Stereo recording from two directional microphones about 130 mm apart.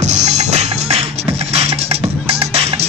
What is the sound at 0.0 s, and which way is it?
Music, 65° right (ahead or behind).